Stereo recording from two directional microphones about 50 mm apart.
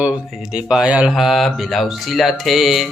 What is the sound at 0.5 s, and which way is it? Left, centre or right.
Speech, centre.